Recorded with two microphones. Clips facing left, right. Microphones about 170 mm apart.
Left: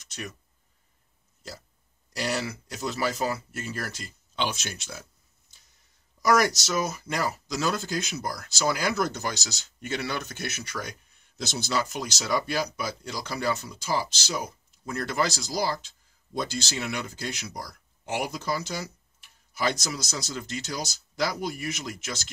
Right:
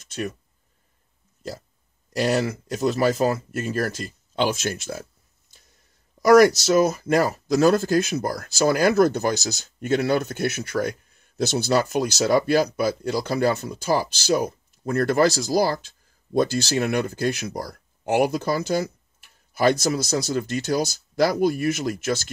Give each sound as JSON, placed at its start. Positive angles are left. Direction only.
{"t": 0.0, "sound": "speech", "side_deg": -55}
{"t": 2.1, "sound": "speech", "side_deg": -50}
{"t": 6.2, "sound": "speech", "side_deg": -55}